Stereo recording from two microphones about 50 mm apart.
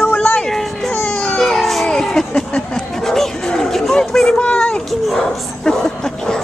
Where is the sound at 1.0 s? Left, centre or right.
Centre.